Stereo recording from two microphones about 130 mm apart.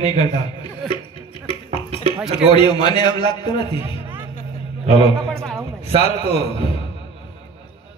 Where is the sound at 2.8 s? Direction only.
35° left (ahead or behind).